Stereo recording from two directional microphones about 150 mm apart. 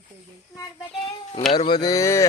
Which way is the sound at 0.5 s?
30° left (ahead or behind).